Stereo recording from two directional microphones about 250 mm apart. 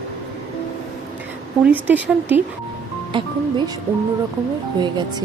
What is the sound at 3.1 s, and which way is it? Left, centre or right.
Speech, centre.